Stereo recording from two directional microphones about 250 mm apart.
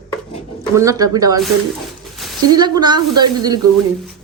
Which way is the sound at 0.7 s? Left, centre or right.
Centre.